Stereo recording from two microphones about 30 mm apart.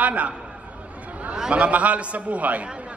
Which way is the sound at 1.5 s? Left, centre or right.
Right.